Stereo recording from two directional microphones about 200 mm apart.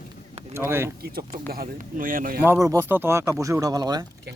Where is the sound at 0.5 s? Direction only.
10° right (ahead or behind).